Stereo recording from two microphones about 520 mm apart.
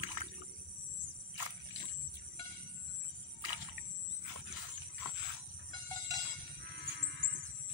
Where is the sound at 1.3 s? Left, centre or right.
Right.